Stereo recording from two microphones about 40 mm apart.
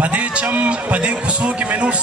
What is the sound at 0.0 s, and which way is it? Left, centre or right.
A man's voice, right.